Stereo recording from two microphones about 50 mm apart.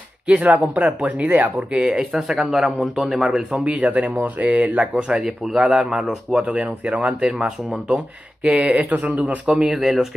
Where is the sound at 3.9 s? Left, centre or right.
Right.